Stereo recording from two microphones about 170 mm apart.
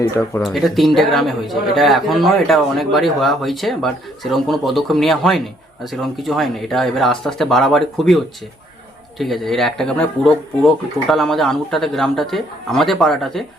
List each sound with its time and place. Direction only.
0.1 s speech: 15° left (ahead or behind)
0.4 s speech: centre (ahead or behind)